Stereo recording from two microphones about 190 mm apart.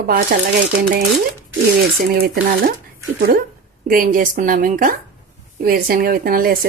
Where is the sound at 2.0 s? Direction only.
55° right (ahead or behind).